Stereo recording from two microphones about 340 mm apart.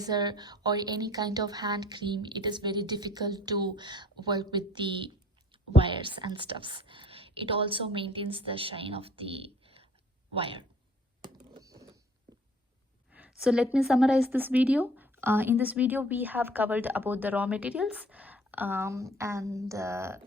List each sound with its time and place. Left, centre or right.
0.0 s a woman's voice: centre
11.6 s a sound: centre
13.1 s speech: centre